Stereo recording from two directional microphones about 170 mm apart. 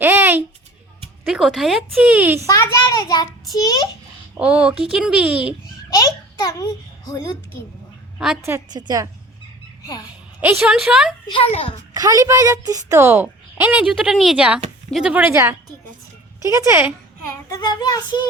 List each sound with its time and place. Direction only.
0.0 s a sound: 15° right (ahead or behind)
1.3 s a woman's voice: centre (ahead or behind)
2.9 s child singing: 20° left (ahead or behind)
4.4 s a woman's voice: 5° right (ahead or behind)
5.9 s a child's voice: 20° left (ahead or behind)
8.4 s a woman's voice: 15° right (ahead or behind)
10.4 s a woman's voice: 5° right (ahead or behind)
11.3 s a child's voice: 35° left (ahead or behind)
11.9 s a woman's voice: 20° right (ahead or behind)
17.2 s child singing: 20° left (ahead or behind)